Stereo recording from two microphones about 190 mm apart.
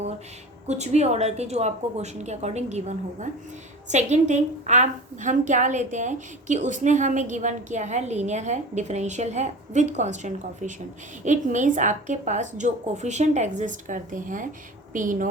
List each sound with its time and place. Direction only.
0.7 s a woman's voice: 35° right (ahead or behind)